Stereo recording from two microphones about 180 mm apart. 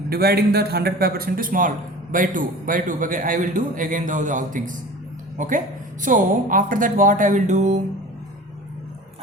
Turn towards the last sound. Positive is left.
turn(degrees=-40)  # may be behind; listen again after turning